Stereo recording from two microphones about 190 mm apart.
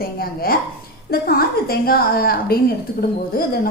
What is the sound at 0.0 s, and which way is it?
A woman's voice, 55° left (ahead or behind).